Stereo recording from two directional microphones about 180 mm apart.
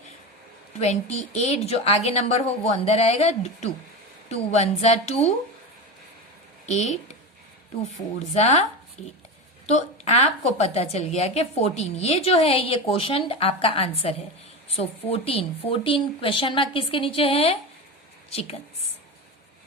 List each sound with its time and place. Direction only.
0.8 s a woman's voice: 40° left (ahead or behind)
6.7 s a woman's voice: 40° left (ahead or behind)
8.3 s a woman's voice: 40° left (ahead or behind)
9.6 s a woman's voice: 40° left (ahead or behind)